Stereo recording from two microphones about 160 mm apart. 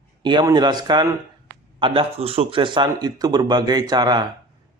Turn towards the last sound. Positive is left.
turn(degrees=-25)  # may be behind; listen again after turning